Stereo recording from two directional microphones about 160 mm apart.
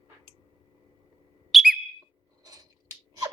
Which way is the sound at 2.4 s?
25° right (ahead or behind).